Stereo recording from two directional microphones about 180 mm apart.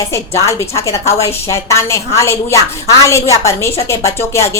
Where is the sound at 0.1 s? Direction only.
15° left (ahead or behind).